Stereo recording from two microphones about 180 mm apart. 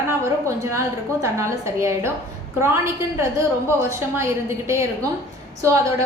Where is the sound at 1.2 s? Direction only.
15° right (ahead or behind).